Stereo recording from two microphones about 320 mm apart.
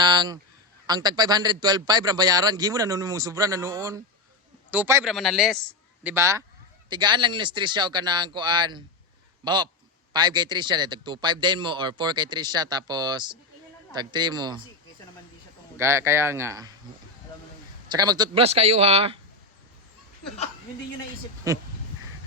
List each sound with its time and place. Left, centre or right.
0.0 s honk: centre
0.9 s a man's voice: centre
15.8 s a man's voice: centre
17.8 s a man's voice: centre